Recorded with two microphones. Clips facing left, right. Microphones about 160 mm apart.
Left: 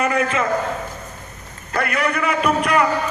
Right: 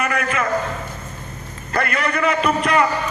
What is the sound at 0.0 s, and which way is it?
Speech, 30° left (ahead or behind).